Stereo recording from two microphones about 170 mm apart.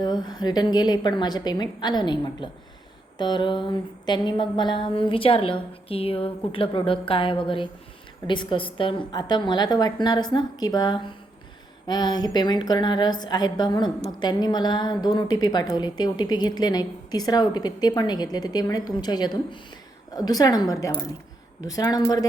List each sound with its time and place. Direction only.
0.0 s a woman's voice: 25° left (ahead or behind)
3.2 s a sound: 25° left (ahead or behind)
8.3 s a woman's voice: 25° left (ahead or behind)